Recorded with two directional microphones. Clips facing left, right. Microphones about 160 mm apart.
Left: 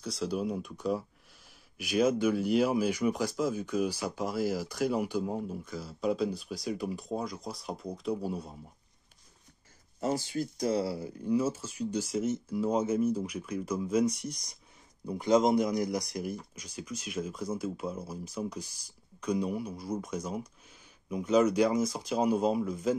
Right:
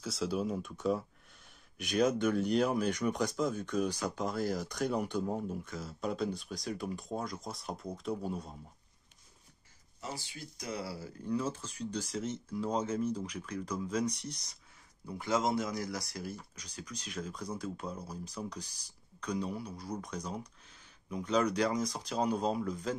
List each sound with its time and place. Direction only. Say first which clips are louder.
0.0 s speech: left 2 dB; centre (ahead or behind)
9.9 s speech: left 13 dB; 45° left (ahead or behind)
10.7 s speech: left 5 dB; 25° left (ahead or behind)
11.3 s speech: left 6 dB; 5° left (ahead or behind)